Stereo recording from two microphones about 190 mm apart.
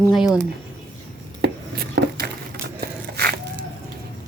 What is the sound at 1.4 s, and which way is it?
Chopping, 60° right (ahead or behind).